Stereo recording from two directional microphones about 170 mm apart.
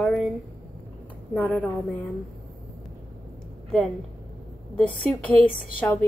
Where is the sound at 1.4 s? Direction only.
10° left (ahead or behind).